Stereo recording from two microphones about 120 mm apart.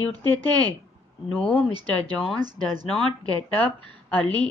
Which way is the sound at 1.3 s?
10° left (ahead or behind).